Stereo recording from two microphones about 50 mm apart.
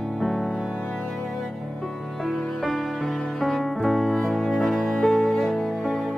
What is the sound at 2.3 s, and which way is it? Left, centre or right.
Music, centre.